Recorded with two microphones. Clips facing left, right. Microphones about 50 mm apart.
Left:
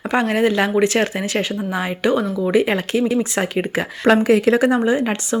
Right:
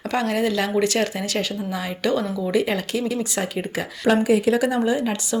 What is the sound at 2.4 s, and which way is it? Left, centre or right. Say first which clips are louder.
Speech: left 5 dB; left.